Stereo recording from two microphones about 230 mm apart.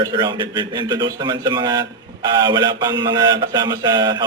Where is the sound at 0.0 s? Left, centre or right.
Centre.